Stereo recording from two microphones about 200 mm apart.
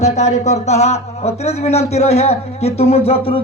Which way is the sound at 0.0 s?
35° left (ahead or behind).